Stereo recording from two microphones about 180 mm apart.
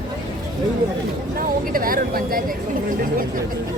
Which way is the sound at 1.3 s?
50° right (ahead or behind).